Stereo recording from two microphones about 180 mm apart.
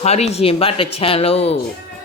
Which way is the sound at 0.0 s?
35° left (ahead or behind).